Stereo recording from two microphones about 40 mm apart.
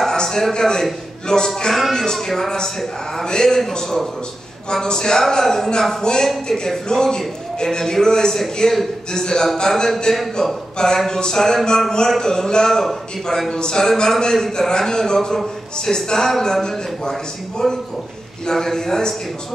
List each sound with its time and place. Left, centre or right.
0.1 s a man's voice: centre
1.7 s music: centre
2.1 s a man's voice: centre
11.1 s a man's voice: centre